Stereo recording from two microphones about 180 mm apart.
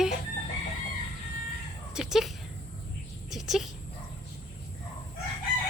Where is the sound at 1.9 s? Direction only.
5° right (ahead or behind).